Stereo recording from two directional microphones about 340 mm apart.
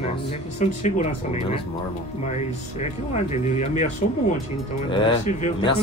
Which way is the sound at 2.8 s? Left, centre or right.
Centre.